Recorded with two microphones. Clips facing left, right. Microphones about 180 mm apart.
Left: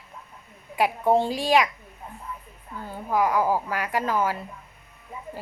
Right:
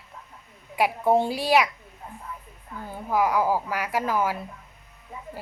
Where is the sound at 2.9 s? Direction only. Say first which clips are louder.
Even; 10° right (ahead or behind).